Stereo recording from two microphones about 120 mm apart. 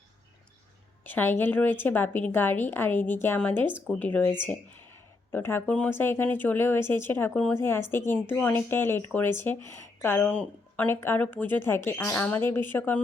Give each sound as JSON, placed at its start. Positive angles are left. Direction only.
{"t": 1.0, "sound": "speech", "side_deg": 15}